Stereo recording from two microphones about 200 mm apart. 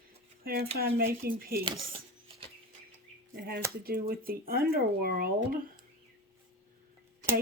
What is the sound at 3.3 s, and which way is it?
Speech, 50° right (ahead or behind).